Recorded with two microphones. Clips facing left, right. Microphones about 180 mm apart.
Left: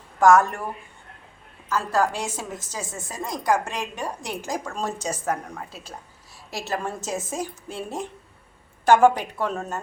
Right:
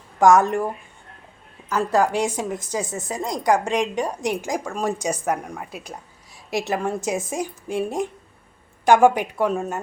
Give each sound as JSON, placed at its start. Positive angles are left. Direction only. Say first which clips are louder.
{"t": 0.2, "sound": "a woman's voice", "louder": "right 1 dB", "side_deg": -15}
{"t": 1.7, "sound": "a woman's voice", "louder": "right 4 dB", "side_deg": -15}